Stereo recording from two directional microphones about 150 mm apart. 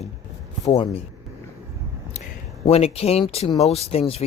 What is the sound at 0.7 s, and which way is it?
Speech, 35° left (ahead or behind).